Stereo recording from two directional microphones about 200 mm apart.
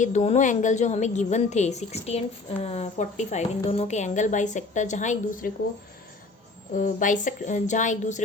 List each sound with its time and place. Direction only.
0.0 s a woman's voice: 35° left (ahead or behind)
6.7 s a woman's voice: 40° left (ahead or behind)